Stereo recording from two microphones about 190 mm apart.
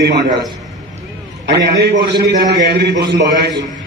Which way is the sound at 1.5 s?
60° right (ahead or behind).